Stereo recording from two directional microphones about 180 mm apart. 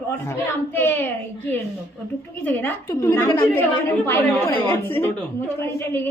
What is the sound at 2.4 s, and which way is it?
A woman's voice, 10° left (ahead or behind).